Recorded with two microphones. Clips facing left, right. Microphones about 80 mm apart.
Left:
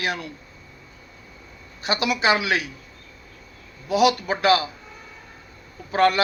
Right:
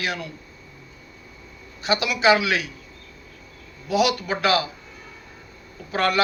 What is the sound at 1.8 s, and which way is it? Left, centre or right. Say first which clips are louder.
Speech: right 2 dB; left.